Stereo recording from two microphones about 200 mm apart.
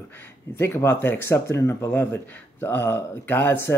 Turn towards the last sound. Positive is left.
turn(degrees=10)  # may be behind; listen again after turning